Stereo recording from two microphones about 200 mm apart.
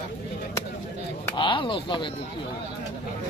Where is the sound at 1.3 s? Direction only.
25° left (ahead or behind).